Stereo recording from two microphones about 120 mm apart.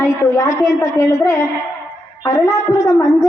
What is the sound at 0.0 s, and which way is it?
A woman's voice, 25° left (ahead or behind).